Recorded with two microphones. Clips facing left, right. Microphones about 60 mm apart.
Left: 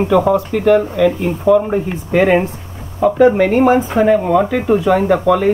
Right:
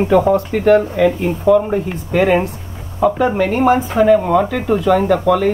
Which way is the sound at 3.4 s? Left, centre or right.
Left.